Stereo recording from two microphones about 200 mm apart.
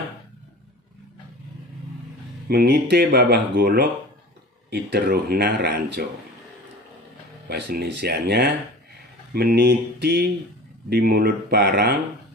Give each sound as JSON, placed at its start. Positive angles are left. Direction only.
{"t": 2.4, "sound": "speech", "side_deg": -55}
{"t": 7.4, "sound": "speech", "side_deg": -55}